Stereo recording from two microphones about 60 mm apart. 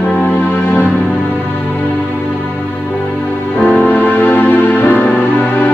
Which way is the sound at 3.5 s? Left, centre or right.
Left.